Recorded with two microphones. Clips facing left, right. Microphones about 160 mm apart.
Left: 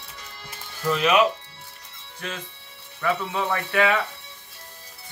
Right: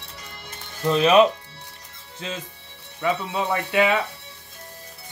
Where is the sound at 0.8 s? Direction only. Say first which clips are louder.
Right 4 dB; 30° right (ahead or behind).